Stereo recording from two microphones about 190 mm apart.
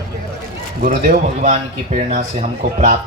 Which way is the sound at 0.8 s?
45° right (ahead or behind).